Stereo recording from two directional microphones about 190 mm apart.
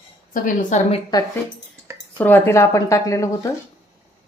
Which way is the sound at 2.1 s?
10° left (ahead or behind).